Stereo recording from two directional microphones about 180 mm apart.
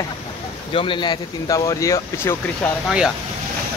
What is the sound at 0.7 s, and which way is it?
Speech, 30° left (ahead or behind).